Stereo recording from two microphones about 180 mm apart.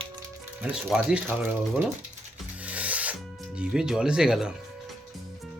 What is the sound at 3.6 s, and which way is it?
Speech, 5° right (ahead or behind).